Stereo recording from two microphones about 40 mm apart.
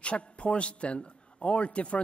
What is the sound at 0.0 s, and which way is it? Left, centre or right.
A man's voice, left.